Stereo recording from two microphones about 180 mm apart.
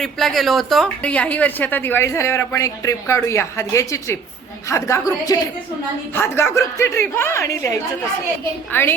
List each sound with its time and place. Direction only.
0.0 s a woman's voice: centre (ahead or behind)